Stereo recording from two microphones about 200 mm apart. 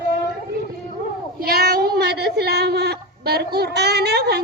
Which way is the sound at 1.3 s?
50° right (ahead or behind).